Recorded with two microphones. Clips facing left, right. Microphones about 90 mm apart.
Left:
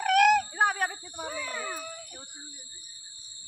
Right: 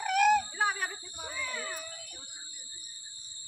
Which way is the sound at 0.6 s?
55° left (ahead or behind).